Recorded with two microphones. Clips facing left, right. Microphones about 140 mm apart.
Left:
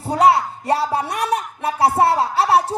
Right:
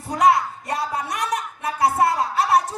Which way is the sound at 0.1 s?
30° left (ahead or behind).